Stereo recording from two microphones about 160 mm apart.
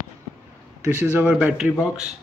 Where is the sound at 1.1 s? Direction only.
5° right (ahead or behind).